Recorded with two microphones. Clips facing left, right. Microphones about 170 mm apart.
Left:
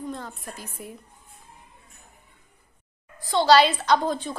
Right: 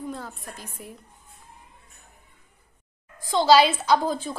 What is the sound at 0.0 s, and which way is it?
Speech, 5° right (ahead or behind).